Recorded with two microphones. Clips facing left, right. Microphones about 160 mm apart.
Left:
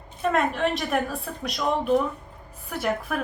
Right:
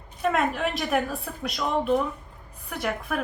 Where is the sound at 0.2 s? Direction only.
Centre (ahead or behind).